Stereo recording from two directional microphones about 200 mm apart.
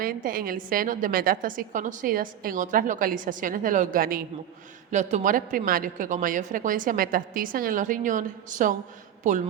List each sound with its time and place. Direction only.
0.0 s a woman's voice: 45° right (ahead or behind)